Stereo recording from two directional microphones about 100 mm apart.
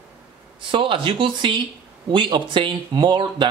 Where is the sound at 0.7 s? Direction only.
60° right (ahead or behind).